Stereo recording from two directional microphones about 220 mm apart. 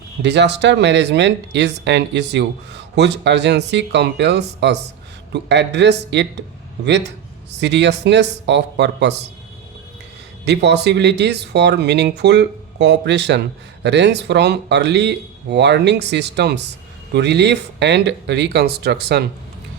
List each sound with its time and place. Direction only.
0.2 s speech: 50° right (ahead or behind)
7.6 s speech: 50° right (ahead or behind)
10.4 s speech: 50° right (ahead or behind)